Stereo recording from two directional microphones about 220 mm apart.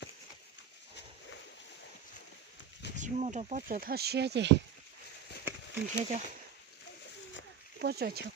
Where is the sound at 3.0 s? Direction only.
35° right (ahead or behind); by 4.6 s 50° right (ahead or behind).